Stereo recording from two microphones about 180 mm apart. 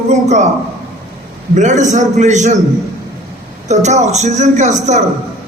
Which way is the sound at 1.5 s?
40° right (ahead or behind).